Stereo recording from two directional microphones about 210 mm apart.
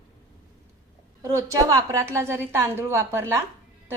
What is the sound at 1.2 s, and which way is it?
A woman's voice, 15° right (ahead or behind).